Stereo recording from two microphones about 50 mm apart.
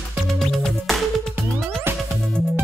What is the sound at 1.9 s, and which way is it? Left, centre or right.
Music, right.